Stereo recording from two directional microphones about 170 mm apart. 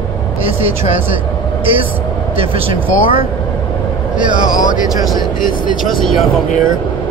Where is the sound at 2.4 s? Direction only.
35° right (ahead or behind).